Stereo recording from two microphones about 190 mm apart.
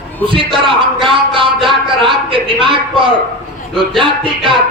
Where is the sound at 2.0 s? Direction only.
25° right (ahead or behind).